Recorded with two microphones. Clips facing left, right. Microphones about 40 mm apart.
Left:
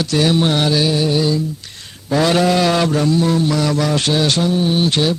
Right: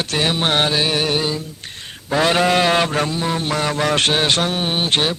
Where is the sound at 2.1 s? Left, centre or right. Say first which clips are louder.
Left 2 dB; right.